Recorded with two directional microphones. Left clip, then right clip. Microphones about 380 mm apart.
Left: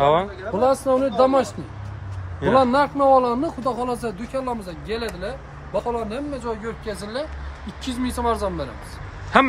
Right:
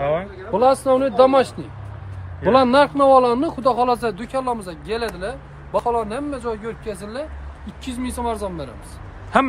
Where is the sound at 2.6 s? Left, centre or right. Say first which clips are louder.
Right 3 dB; right.